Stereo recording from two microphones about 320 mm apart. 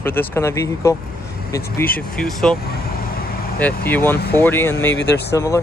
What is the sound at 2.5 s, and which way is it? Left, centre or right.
Vehicle, left.